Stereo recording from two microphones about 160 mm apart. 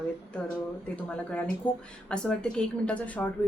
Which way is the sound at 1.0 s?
10° left (ahead or behind).